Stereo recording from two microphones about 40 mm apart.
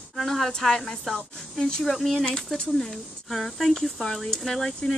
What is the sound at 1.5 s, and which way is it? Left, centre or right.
Speech, centre.